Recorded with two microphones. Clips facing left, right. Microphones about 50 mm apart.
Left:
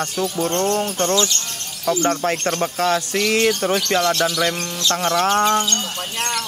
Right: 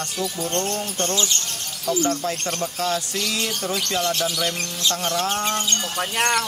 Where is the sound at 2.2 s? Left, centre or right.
Left.